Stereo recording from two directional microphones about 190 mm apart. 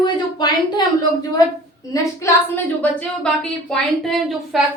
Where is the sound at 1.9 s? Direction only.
10° left (ahead or behind).